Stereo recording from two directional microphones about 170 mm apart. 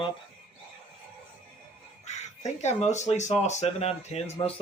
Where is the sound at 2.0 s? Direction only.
40° left (ahead or behind).